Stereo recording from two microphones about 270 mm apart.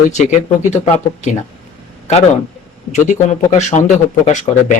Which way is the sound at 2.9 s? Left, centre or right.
Left.